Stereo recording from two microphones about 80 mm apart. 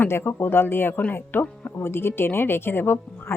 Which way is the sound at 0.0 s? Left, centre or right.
Left.